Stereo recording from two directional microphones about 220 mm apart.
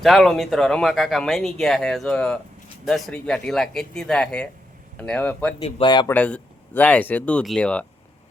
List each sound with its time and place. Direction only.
0.0 s speech: centre (ahead or behind)
5.5 s speech: 20° left (ahead or behind)
6.1 s speech: 5° left (ahead or behind)